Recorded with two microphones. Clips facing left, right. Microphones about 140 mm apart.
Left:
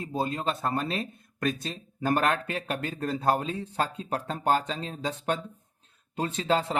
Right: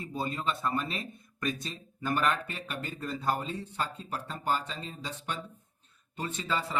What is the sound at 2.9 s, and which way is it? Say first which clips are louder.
Speech: left 5 dB; 60° left (ahead or behind).